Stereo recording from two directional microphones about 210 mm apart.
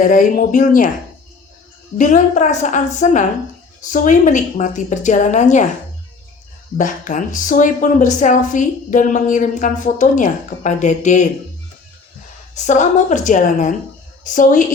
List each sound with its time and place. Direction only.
0.0 s speech: 40° left (ahead or behind)
2.0 s speech: 35° left (ahead or behind)
6.7 s speech: 40° left (ahead or behind)
12.5 s speech: 35° left (ahead or behind)